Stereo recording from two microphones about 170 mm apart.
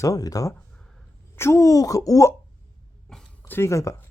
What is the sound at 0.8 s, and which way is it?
Dog, 5° left (ahead or behind).